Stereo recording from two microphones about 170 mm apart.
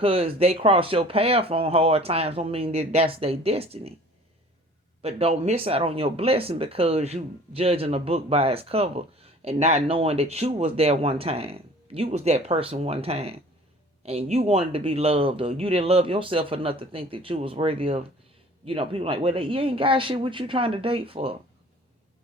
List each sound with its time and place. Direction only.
0.0 s speech: 35° right (ahead or behind)
5.0 s speech: 35° right (ahead or behind)